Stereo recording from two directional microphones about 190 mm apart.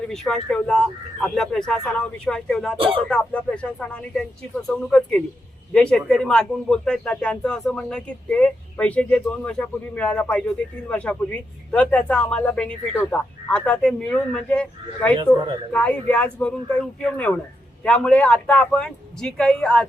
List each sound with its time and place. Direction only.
0.1 s speech: centre (ahead or behind)
2.7 s speech: 30° right (ahead or behind)
3.1 s speech: 5° left (ahead or behind)